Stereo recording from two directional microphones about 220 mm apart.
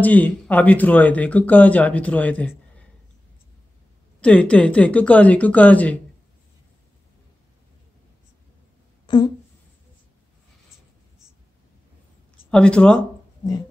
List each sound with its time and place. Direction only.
0.0 s speech: 5° left (ahead or behind)
4.2 s speech: 5° left (ahead or behind)
9.0 s a sound: 20° left (ahead or behind)
12.4 s speech: 5° left (ahead or behind)